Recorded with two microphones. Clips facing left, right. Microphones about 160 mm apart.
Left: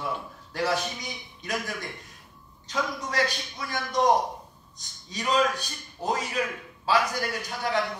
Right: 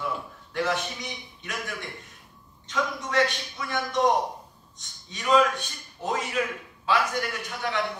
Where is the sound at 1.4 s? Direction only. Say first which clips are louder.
Left 3 dB; 35° left (ahead or behind).